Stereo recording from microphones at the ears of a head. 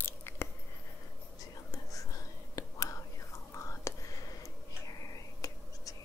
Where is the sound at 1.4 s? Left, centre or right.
Left.